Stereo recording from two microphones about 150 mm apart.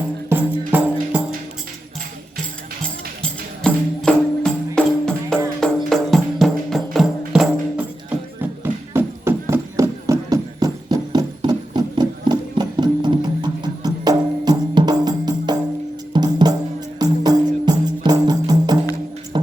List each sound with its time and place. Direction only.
0.7 s music: 10° right (ahead or behind)
3.2 s music: 5° left (ahead or behind)
8.4 s music: 15° right (ahead or behind)